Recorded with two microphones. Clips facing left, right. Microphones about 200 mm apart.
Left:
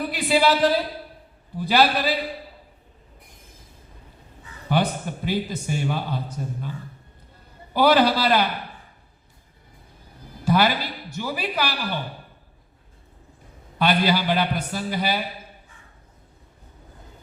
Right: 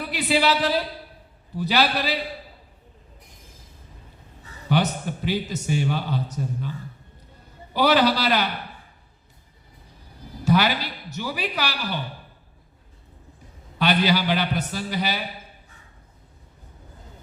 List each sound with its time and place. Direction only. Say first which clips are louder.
0.1 s speech: left 1 dB; 50° left (ahead or behind)
4.7 s a sound: even; 50° left (ahead or behind)
5.6 s speech: right 1 dB; 50° left (ahead or behind)
10.4 s a man's voice: even; 50° left (ahead or behind)
13.7 s a man's voice: even; 50° left (ahead or behind)